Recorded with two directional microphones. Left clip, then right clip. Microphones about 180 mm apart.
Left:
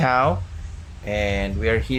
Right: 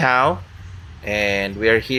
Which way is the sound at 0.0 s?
15° right (ahead or behind).